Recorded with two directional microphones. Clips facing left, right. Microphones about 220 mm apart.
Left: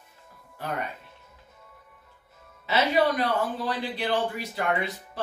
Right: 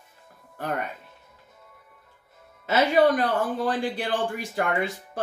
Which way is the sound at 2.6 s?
50° right (ahead or behind).